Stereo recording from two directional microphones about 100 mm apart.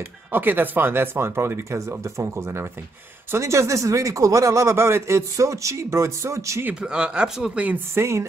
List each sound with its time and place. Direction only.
0.3 s speech: 20° right (ahead or behind)
6.6 s speech: 10° right (ahead or behind)
7.9 s speech: 25° right (ahead or behind)